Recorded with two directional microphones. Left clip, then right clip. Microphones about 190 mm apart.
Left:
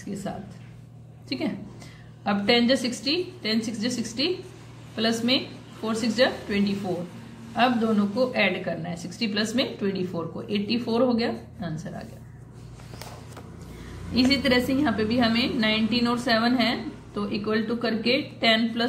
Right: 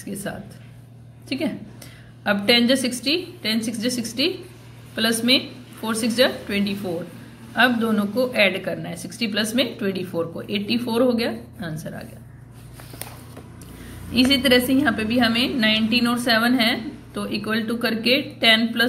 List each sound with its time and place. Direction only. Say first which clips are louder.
0.3 s a woman's voice: right 3 dB; 20° right (ahead or behind)
2.2 s a woman's voice: right 4 dB; 15° right (ahead or behind)
14.1 s a woman's voice: right 5 dB; 15° right (ahead or behind)